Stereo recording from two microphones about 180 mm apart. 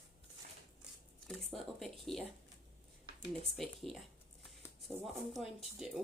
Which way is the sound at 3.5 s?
Centre (ahead or behind).